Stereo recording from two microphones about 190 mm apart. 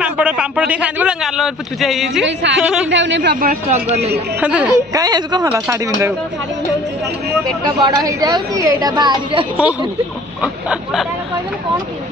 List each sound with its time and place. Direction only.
0.0 s speech: 5° right (ahead or behind)
2.2 s speech: 70° right (ahead or behind)
2.6 s a sound: 5° right (ahead or behind)
2.9 s speech: 70° right (ahead or behind)
3.3 s speech: 50° right (ahead or behind)
4.4 s a man's voice: 5° right (ahead or behind)
4.9 s a man's voice: 20° right (ahead or behind)
7.9 s a woman's voice: 20° right (ahead or behind)
9.6 s a man's voice: 5° right (ahead or behind)
10.4 s a sound: 5° right (ahead or behind)